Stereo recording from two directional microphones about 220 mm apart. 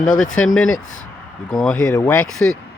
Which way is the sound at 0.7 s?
65° left (ahead or behind).